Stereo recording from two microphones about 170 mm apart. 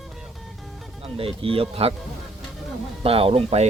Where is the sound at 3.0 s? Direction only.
35° right (ahead or behind).